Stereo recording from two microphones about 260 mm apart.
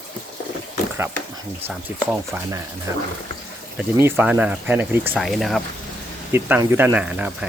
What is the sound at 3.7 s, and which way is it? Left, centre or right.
Speech, centre.